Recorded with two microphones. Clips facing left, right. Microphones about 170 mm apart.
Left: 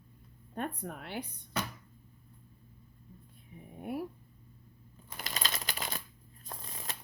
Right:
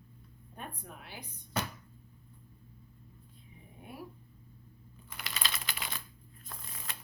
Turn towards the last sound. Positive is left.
turn(degrees=35)  # may be behind; listen again after turning